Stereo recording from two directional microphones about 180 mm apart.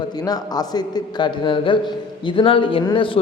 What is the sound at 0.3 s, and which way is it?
A man's voice, 20° left (ahead or behind).